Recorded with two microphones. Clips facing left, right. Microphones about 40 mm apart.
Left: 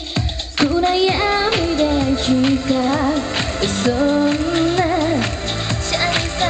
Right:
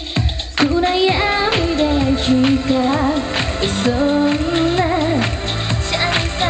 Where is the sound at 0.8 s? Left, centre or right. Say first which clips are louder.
Right 1 dB; right.